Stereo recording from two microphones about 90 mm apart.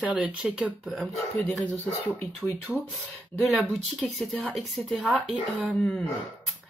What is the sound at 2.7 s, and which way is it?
Speech, centre (ahead or behind).